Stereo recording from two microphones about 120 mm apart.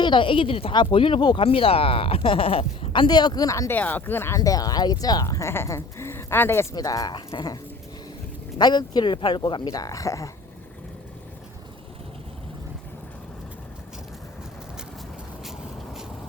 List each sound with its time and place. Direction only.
0.0 s speech: 45° left (ahead or behind); by 3.8 s 25° left (ahead or behind)
3.8 s speech: 15° left (ahead or behind)
4.4 s speech: 30° left (ahead or behind)
6.7 s speech: 30° left (ahead or behind)